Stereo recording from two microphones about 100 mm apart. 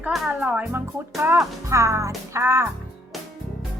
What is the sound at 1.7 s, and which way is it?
Music, 30° right (ahead or behind).